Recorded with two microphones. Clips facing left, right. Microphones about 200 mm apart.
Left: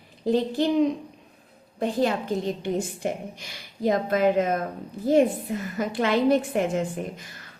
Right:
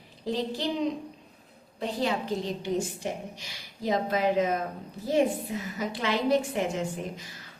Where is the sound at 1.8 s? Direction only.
50° left (ahead or behind).